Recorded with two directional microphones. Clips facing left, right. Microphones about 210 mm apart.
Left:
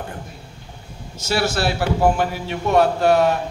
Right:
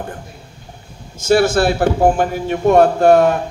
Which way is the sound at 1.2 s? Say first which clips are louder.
Right 8 dB; 50° right (ahead or behind).